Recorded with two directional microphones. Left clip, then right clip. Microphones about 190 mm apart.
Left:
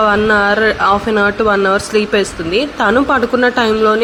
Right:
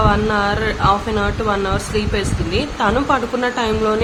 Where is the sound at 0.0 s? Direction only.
30° left (ahead or behind).